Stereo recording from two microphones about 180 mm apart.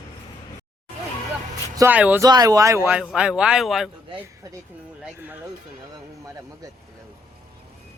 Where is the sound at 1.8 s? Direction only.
10° right (ahead or behind).